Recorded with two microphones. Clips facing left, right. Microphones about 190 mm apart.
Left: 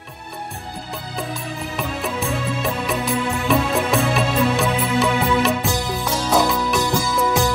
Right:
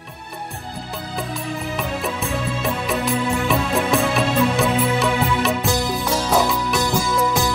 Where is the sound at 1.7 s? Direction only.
Centre (ahead or behind).